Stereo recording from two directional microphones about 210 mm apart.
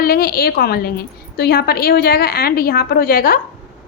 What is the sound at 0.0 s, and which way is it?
A woman's voice, 45° left (ahead or behind).